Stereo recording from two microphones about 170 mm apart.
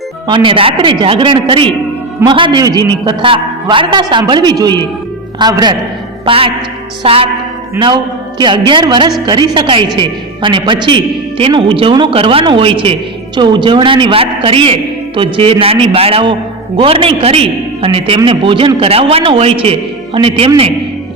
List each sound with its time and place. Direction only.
0.3 s a woman's voice: 30° right (ahead or behind)